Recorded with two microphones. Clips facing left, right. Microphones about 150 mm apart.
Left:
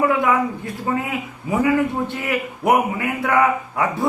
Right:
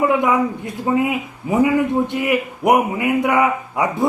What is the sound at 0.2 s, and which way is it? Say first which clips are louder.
A man's voice: right 2 dB; 15° right (ahead or behind).